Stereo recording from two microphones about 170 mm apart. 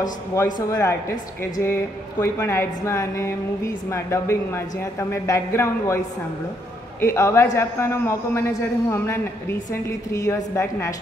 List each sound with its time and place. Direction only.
0.0 s a woman's voice: 15° left (ahead or behind)
7.0 s a woman's voice: 15° left (ahead or behind)